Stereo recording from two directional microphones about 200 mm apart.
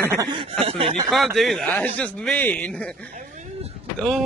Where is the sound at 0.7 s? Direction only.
30° right (ahead or behind).